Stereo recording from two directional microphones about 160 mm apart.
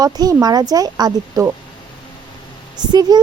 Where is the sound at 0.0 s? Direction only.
25° right (ahead or behind).